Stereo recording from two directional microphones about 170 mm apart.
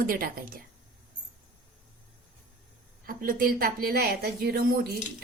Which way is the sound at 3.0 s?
55° right (ahead or behind).